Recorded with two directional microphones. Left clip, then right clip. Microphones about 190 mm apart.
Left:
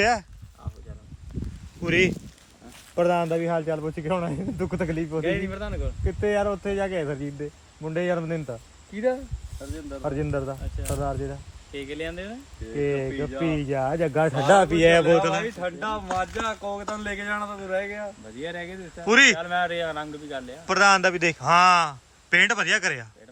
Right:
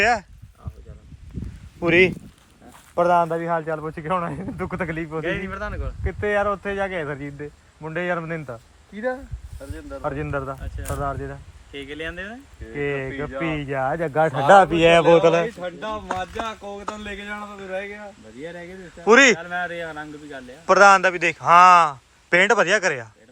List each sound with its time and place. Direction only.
0.0 s speech: 10° left (ahead or behind)
1.8 s speech: 25° right (ahead or behind)
2.9 s speech: 10° right (ahead or behind)
3.4 s speech: 5° right (ahead or behind)
10.6 s speech: centre (ahead or behind)
10.9 s speech: 15° right (ahead or behind)
11.7 s speech: 5° left (ahead or behind)
13.1 s speech: 15° right (ahead or behind)
13.5 s speech: centre (ahead or behind); by 14.8 s 25° right (ahead or behind)
15.2 s speech: 5° right (ahead or behind)